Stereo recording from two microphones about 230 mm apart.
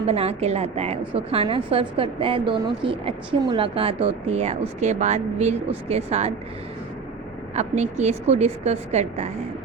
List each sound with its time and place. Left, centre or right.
0.1 s a woman's voice: right
7.5 s a woman's voice: right